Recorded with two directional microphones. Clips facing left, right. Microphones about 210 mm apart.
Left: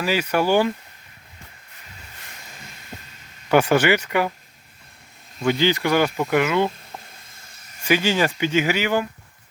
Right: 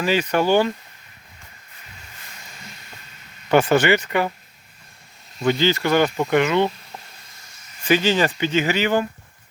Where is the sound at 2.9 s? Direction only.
40° left (ahead or behind).